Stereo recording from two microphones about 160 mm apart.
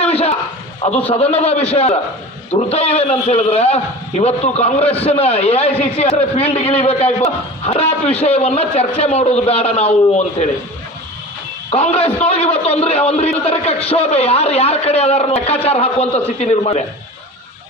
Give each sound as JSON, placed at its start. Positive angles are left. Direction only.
{"t": 0.0, "sound": "a sound", "side_deg": 40}
{"t": 1.0, "sound": "a man's voice", "side_deg": 40}
{"t": 11.7, "sound": "a man's voice", "side_deg": 40}